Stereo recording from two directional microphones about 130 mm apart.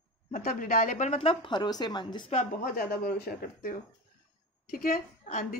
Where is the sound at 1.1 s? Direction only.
45° left (ahead or behind).